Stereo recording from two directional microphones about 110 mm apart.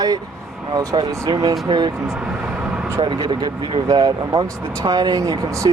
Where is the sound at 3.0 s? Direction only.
50° right (ahead or behind).